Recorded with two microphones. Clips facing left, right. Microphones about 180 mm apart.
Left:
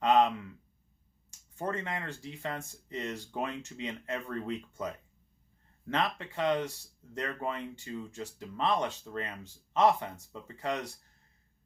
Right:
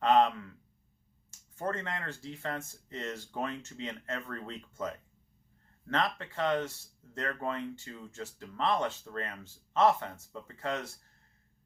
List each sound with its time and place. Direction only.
0.0 s a sound: 15° left (ahead or behind)
1.5 s speech: 15° left (ahead or behind)
5.9 s speech: 15° left (ahead or behind)